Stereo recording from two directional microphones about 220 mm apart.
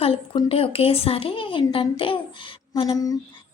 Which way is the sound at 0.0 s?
25° left (ahead or behind).